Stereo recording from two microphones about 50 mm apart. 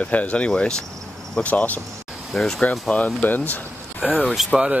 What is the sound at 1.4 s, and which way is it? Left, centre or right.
Speech, left.